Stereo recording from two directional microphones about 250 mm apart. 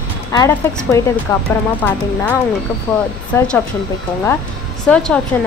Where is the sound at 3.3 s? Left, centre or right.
Centre.